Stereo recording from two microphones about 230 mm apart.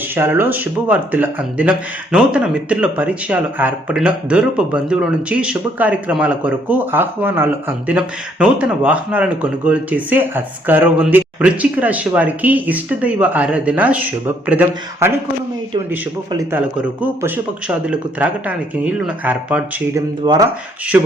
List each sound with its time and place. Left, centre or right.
0.1 s speech: centre
16.3 s speech: centre
20.2 s speech: centre
20.9 s speech: centre